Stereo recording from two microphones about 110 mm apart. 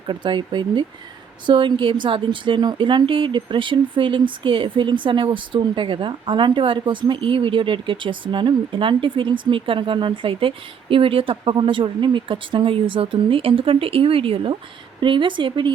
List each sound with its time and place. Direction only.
0.1 s speech: 45° right (ahead or behind)